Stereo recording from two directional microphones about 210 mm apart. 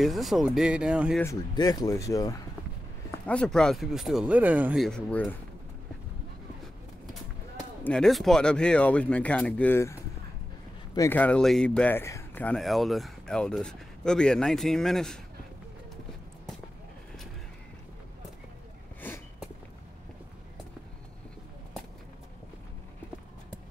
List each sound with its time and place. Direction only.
0.0 s speech: centre (ahead or behind)
1.2 s speech: 15° left (ahead or behind)
3.3 s speech: 5° left (ahead or behind)
7.8 s speech: 5° left (ahead or behind)
11.0 s speech: 10° left (ahead or behind)
18.9 s a sound: 10° left (ahead or behind)